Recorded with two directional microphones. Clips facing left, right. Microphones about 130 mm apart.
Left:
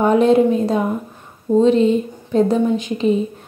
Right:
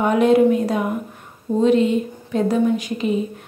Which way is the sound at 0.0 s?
30° left (ahead or behind).